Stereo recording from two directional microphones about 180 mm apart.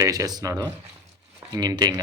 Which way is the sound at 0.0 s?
20° right (ahead or behind).